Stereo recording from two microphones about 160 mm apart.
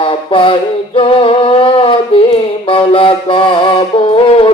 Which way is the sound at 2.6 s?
35° left (ahead or behind).